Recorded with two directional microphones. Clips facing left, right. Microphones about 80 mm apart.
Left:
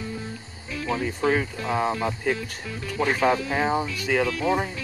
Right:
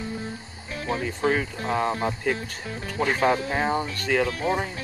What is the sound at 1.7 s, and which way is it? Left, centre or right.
Speech, centre.